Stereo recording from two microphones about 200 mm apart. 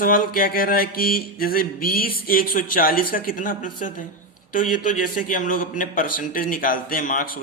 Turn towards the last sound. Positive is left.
turn(degrees=45)  # may be behind; listen again after turning